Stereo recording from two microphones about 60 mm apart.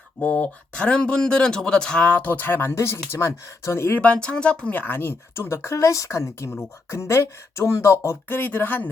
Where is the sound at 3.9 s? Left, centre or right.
Left.